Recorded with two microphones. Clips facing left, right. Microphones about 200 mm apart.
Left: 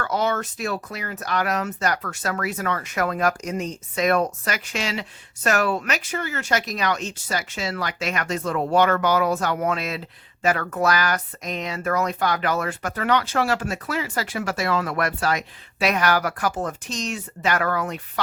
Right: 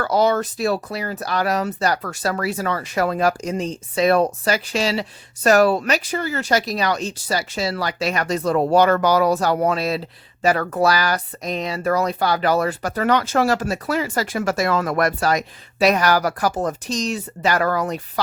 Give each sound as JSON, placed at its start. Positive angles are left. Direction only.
{"t": 0.0, "sound": "speech", "side_deg": -35}